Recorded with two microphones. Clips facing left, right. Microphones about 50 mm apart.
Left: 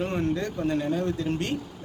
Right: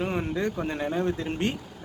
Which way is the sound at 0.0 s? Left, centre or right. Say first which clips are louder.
Left 1 dB; centre.